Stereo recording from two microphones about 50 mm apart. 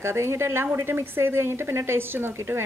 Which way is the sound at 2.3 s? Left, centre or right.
Right.